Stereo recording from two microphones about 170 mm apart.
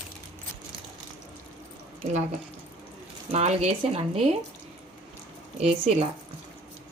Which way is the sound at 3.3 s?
40° right (ahead or behind).